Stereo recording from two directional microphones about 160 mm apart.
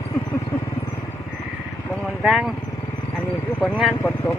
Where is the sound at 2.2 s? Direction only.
Centre (ahead or behind).